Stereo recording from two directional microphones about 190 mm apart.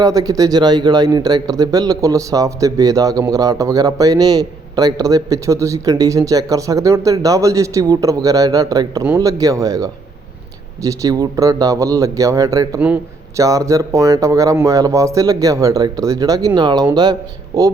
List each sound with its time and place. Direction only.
0.0 s speech: 20° right (ahead or behind)
12.8 s a man's voice: 5° right (ahead or behind)
13.4 s speech: 15° right (ahead or behind)